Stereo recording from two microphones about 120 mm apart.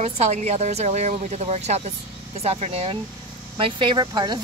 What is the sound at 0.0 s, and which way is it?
Speech, 65° right (ahead or behind).